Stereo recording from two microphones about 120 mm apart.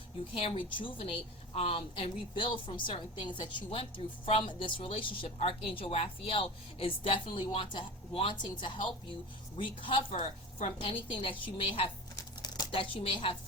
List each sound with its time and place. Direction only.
0.3 s speech: 50° left (ahead or behind)
3.7 s speech: 55° left (ahead or behind)